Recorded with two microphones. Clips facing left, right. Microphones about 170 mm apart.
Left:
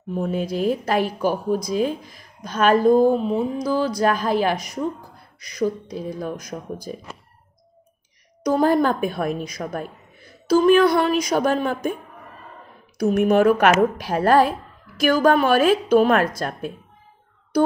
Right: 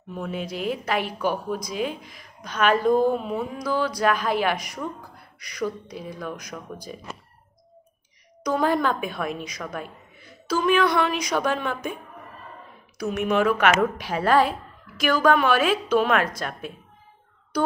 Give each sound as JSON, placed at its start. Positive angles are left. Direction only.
{"t": 0.1, "sound": "a woman's voice", "side_deg": 40}
{"t": 3.6, "sound": "a woman's voice", "side_deg": 40}
{"t": 5.9, "sound": "a woman's voice", "side_deg": 35}
{"t": 6.3, "sound": "a woman's voice", "side_deg": 50}
{"t": 8.5, "sound": "a woman's voice", "side_deg": 40}
{"t": 13.1, "sound": "a woman's voice", "side_deg": 45}